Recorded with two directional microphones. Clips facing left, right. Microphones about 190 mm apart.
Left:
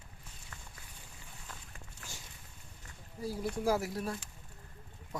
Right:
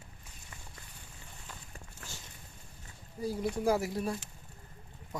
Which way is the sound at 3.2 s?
5° left (ahead or behind).